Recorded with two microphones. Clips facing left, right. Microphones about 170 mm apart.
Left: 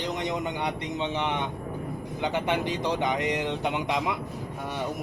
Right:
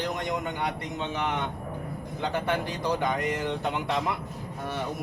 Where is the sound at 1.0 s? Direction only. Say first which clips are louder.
Left 1 dB; 20° left (ahead or behind).